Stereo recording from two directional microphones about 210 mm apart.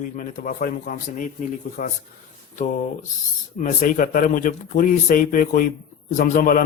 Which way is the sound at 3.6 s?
40° left (ahead or behind).